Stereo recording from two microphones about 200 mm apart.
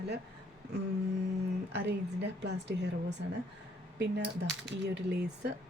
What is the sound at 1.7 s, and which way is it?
A woman's voice, 55° right (ahead or behind).